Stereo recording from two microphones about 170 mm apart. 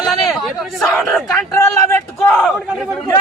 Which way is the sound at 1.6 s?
15° left (ahead or behind).